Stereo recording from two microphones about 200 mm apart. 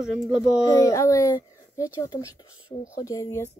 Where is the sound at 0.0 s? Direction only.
Centre (ahead or behind).